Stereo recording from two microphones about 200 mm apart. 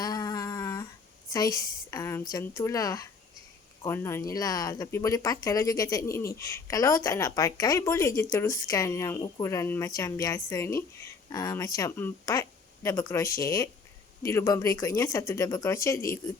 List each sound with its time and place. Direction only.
0.0 s humming: 20° left (ahead or behind)
1.3 s speech: 15° left (ahead or behind)